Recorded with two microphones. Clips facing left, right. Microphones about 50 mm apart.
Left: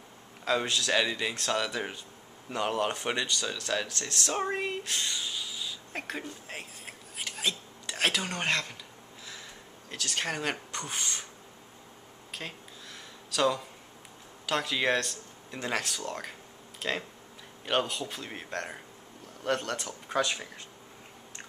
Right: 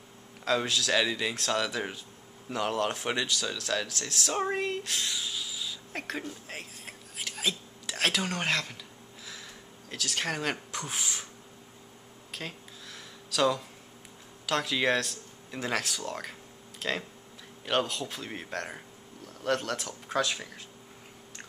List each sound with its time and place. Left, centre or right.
0.5 s speech: centre
9.8 s speech: centre
12.3 s a sound: centre
14.4 s speech: centre